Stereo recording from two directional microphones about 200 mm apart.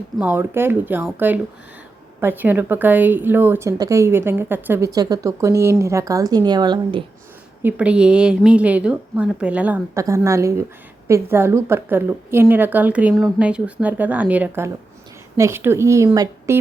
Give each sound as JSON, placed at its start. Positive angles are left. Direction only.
{"t": 0.2, "sound": "a woman's voice", "side_deg": -10}
{"t": 7.6, "sound": "a woman's voice", "side_deg": -5}